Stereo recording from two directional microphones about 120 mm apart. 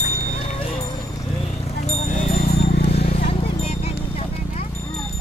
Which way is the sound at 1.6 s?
65° left (ahead or behind).